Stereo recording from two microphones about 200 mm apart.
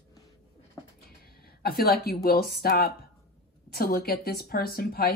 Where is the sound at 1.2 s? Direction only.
50° left (ahead or behind).